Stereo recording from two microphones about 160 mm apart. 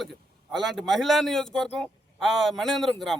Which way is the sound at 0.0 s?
Centre (ahead or behind).